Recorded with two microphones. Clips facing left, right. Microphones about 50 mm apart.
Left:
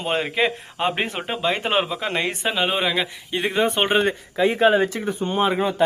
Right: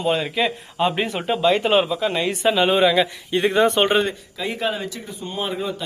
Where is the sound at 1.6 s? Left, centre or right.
Left.